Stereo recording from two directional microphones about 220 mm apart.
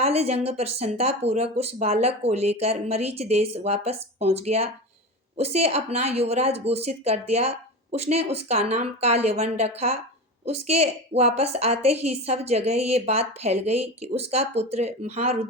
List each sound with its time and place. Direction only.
0.0 s a woman's voice: 30° right (ahead or behind)